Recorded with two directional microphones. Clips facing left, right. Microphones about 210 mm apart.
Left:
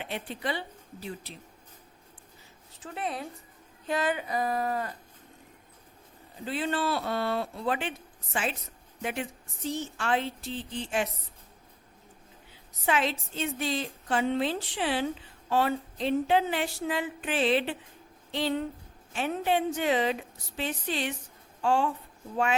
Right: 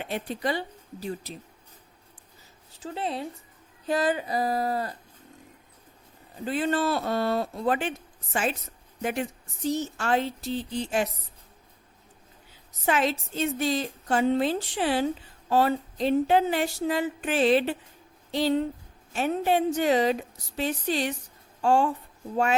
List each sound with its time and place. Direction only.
0.0 s a woman's voice: 40° right (ahead or behind)
2.8 s speech: 30° right (ahead or behind)
6.4 s a woman's voice: 45° right (ahead or behind)
12.8 s a woman's voice: 45° right (ahead or behind)